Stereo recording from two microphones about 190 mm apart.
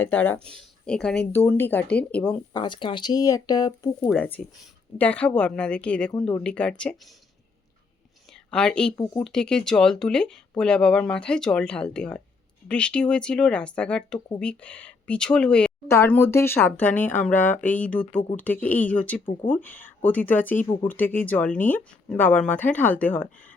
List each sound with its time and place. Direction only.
0.0 s speech: 10° left (ahead or behind)
2.5 s speech: 25° left (ahead or behind)
4.1 s speech: 5° left (ahead or behind)
8.4 s speech: 5° left (ahead or behind)